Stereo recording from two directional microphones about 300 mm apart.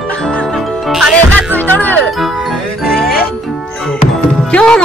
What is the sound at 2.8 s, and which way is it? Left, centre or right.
Music, left.